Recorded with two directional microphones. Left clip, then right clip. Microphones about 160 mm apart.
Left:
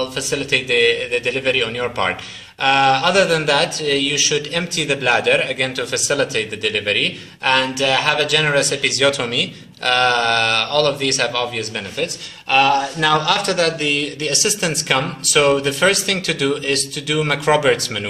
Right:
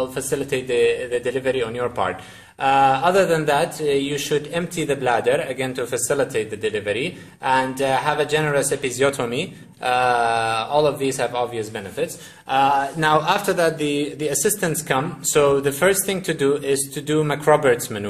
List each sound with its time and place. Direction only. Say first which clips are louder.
0.1 s speech: left 4 dB; 40° right (ahead or behind)